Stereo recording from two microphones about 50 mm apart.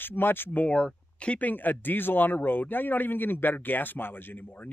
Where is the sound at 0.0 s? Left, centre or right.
Left.